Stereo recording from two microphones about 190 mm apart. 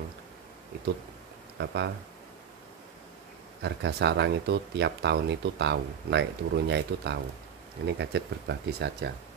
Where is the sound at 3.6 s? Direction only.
60° right (ahead or behind).